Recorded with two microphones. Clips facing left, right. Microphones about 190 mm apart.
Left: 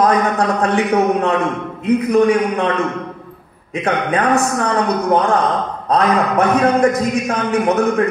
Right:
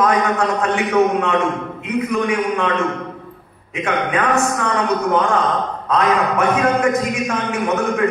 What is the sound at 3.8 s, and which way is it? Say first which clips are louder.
Speech: left 2 dB; 35° left (ahead or behind).